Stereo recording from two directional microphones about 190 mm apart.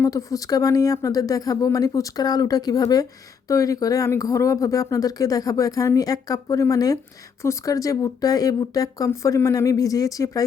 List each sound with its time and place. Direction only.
0.0 s speech: 15° left (ahead or behind)